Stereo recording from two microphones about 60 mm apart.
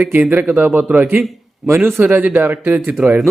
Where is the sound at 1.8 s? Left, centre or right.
Right.